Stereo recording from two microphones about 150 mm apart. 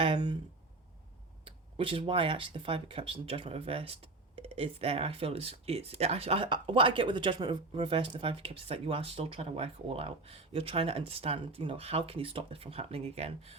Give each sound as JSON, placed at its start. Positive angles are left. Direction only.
{"t": 0.0, "sound": "speech", "side_deg": -30}
{"t": 1.5, "sound": "speech", "side_deg": -35}